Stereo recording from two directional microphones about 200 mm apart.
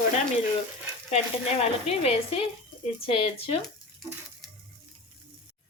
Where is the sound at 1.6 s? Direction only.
30° left (ahead or behind).